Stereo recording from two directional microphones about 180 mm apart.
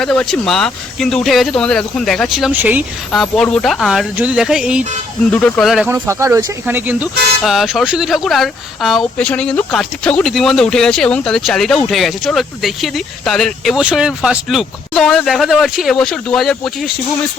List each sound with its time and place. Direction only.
0.0 s speech: 5° left (ahead or behind)
3.1 s speech: centre (ahead or behind)
5.3 s speech: 10° left (ahead or behind)
5.9 s speech: 15° right (ahead or behind); by 16.9 s centre (ahead or behind)